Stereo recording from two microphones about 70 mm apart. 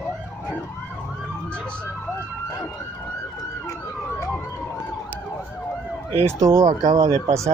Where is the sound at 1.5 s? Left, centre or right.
Centre.